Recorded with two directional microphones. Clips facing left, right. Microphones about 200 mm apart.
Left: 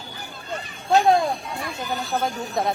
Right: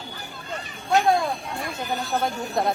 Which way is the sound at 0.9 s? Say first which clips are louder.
Left 3 dB; 25° left (ahead or behind).